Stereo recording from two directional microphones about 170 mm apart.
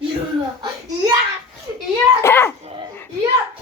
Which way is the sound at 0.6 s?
20° right (ahead or behind).